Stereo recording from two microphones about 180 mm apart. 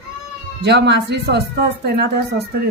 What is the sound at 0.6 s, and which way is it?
A woman's voice, 70° right (ahead or behind).